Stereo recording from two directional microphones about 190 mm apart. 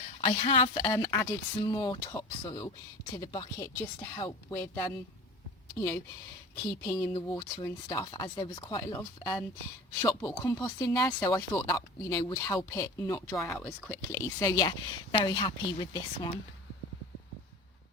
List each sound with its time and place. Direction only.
0.2 s speech: 30° left (ahead or behind)
4.4 s speech: 10° left (ahead or behind)
13.4 s speech: 5° left (ahead or behind); by 16.4 s 25° left (ahead or behind)